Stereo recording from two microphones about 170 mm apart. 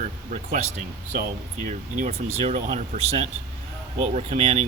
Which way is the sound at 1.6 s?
45° right (ahead or behind).